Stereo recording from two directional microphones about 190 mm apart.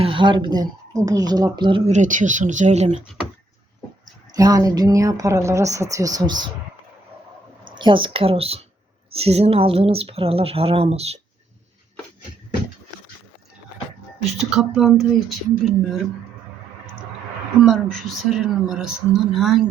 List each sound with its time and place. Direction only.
0.0 s speech: 25° right (ahead or behind)
1.9 s speech: 40° right (ahead or behind)
4.4 s a woman's voice: 20° right (ahead or behind)
7.8 s speech: 25° right (ahead or behind)
14.5 s speech: 5° right (ahead or behind)
17.6 s speech: centre (ahead or behind)